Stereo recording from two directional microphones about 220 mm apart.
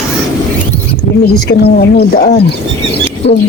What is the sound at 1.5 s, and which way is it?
Speech, 45° left (ahead or behind).